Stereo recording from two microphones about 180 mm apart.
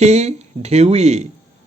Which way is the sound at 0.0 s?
40° right (ahead or behind).